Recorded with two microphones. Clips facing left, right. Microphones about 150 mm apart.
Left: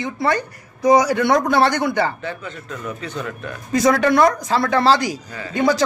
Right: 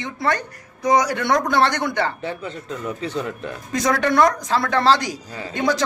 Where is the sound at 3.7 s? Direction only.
5° left (ahead or behind).